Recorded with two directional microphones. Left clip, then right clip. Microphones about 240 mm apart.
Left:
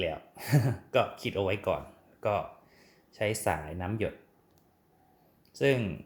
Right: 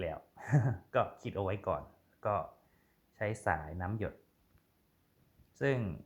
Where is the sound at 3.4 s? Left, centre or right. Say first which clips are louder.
Left 3 dB; centre.